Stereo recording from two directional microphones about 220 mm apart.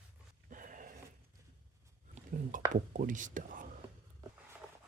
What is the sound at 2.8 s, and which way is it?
Speech, 35° right (ahead or behind).